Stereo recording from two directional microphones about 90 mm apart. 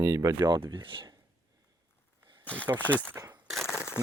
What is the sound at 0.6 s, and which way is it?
Speech, 70° right (ahead or behind).